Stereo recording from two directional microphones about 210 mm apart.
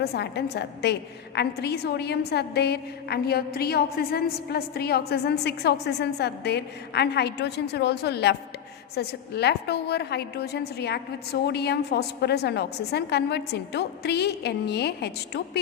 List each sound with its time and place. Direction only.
0.0 s a woman's voice: 50° left (ahead or behind)